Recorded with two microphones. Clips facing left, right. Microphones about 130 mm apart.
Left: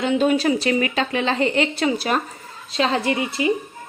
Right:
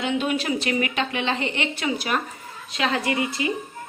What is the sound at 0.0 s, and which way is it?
A woman's voice, 35° left (ahead or behind).